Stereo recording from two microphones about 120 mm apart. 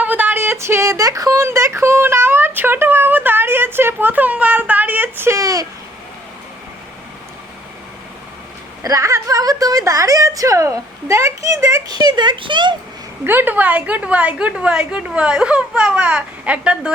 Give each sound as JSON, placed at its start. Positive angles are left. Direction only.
{"t": 0.0, "sound": "speech", "side_deg": -15}
{"t": 8.8, "sound": "a woman's voice", "side_deg": -25}
{"t": 13.2, "sound": "a woman's voice", "side_deg": -15}